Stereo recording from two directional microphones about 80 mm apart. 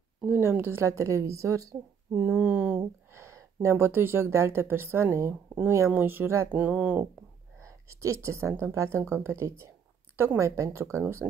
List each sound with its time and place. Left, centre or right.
0.2 s a woman's voice: right
2.1 s speech: right
3.1 s a sound: right
3.7 s a woman's voice: right
6.5 s speech: right
7.6 s a woman's voice: right